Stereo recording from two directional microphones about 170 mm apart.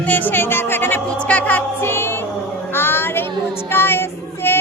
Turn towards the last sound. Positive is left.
turn(degrees=15)  # may be behind; listen again after turning